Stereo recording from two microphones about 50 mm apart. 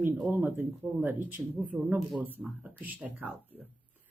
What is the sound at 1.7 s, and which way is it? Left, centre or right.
Speech, right.